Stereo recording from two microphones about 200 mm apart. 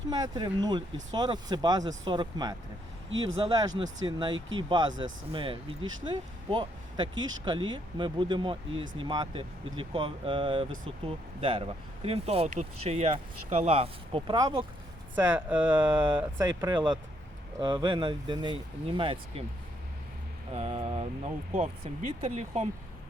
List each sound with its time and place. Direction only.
0.1 s speech: 20° right (ahead or behind)
15.1 s speech: 10° right (ahead or behind)
16.0 s speech: 25° right (ahead or behind)
20.5 s speech: 30° right (ahead or behind)